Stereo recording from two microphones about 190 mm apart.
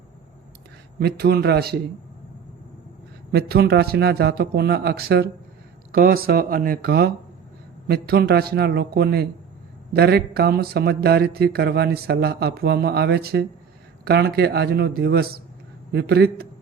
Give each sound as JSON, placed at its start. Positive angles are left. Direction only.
{"t": 0.9, "sound": "speech", "side_deg": -55}
{"t": 3.3, "sound": "speech", "side_deg": -55}